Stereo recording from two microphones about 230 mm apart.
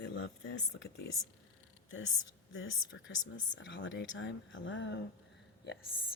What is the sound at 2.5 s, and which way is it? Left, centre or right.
Speech, left.